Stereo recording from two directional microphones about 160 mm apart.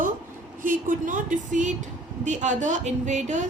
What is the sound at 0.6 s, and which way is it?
Speech, 55° right (ahead or behind).